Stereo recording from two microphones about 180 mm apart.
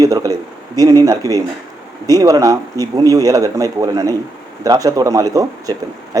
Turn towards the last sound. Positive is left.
turn(degrees=-20)  # may be behind; listen again after turning